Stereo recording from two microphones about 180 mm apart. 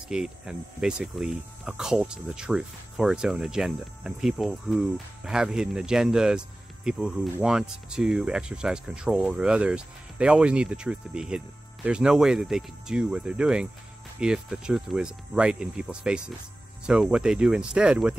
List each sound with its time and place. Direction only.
0.1 s speech: 5° right (ahead or behind)